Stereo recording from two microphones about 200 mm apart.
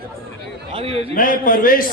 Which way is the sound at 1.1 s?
45° left (ahead or behind).